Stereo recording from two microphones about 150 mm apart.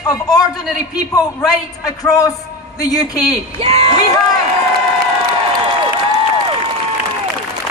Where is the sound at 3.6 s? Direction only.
40° right (ahead or behind).